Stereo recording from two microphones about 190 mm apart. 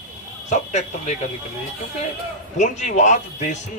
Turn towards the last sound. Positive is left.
turn(degrees=40)  # may be behind; listen again after turning